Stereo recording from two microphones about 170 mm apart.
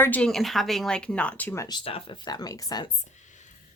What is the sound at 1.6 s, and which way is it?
Speech, 30° left (ahead or behind).